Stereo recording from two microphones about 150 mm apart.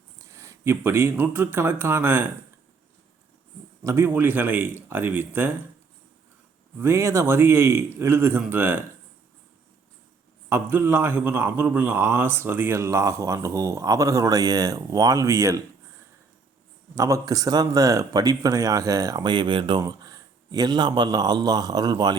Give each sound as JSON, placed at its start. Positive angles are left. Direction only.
{"t": 0.2, "sound": "speech", "side_deg": -20}
{"t": 3.8, "sound": "a man's voice", "side_deg": -15}
{"t": 6.7, "sound": "a man's voice", "side_deg": -20}
{"t": 10.5, "sound": "speech", "side_deg": -15}
{"t": 16.9, "sound": "speech", "side_deg": -20}